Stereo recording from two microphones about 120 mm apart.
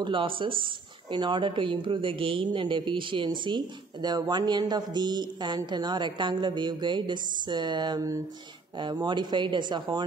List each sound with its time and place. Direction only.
0.0 s speech: 45° right (ahead or behind)